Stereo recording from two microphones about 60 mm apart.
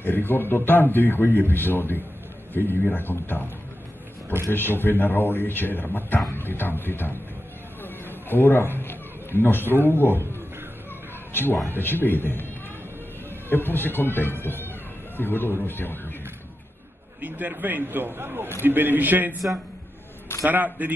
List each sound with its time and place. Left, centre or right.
0.0 s a man's voice: left
4.5 s a man's voice: left
7.8 s a sound: left
9.8 s a man's voice: left
11.7 s a man's voice: left
13.5 s a man's voice: left
17.2 s speech: right
20.4 s a man's voice: right